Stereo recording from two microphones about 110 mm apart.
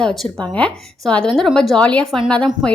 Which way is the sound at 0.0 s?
5° left (ahead or behind).